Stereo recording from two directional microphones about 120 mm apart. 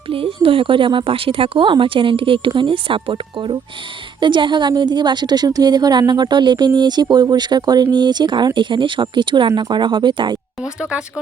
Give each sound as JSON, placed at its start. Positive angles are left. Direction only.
{"t": 0.1, "sound": "a woman's voice", "side_deg": -50}
{"t": 10.6, "sound": "speech", "side_deg": -5}